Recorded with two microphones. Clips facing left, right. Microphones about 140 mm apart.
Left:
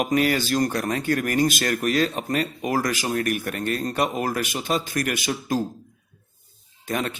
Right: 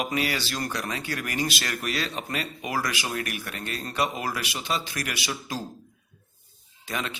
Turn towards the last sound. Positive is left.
turn(degrees=45)  # may be behind; listen again after turning